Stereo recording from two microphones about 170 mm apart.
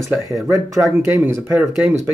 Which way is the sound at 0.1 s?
15° right (ahead or behind).